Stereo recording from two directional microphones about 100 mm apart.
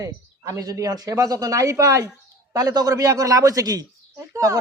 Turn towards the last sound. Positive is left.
turn(degrees=-30)  # may be behind; listen again after turning